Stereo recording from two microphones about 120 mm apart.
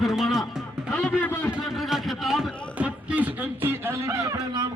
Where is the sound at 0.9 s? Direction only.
10° left (ahead or behind).